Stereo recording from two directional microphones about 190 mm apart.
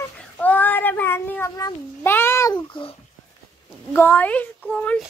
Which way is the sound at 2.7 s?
25° left (ahead or behind).